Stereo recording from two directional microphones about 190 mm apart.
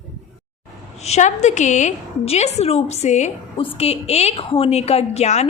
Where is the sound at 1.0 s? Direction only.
35° left (ahead or behind).